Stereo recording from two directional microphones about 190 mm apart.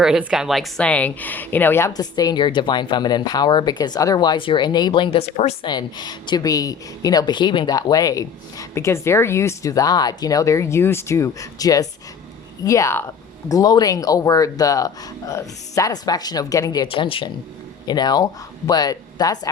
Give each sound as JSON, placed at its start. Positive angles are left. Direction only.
{"t": 0.0, "sound": "a woman's voice", "side_deg": -5}